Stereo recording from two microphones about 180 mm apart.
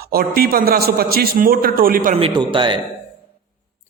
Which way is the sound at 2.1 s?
30° right (ahead or behind).